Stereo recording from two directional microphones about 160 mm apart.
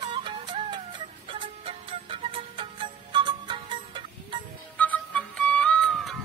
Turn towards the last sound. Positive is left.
turn(degrees=0)  # may be behind; listen again after turning